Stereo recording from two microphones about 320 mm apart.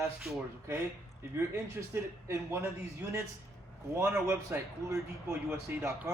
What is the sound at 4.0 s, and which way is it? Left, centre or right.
A man's voice, centre.